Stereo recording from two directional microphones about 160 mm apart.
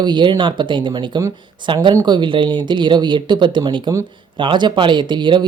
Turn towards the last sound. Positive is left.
turn(degrees=-30)  # may be behind; listen again after turning